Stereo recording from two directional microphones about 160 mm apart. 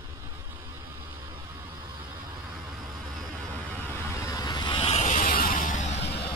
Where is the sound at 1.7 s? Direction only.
30° right (ahead or behind).